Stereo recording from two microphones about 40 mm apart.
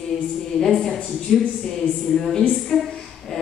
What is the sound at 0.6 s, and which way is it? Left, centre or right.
Speech, centre.